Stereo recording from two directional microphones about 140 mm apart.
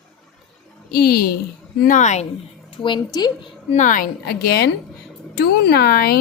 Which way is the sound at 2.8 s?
35° left (ahead or behind).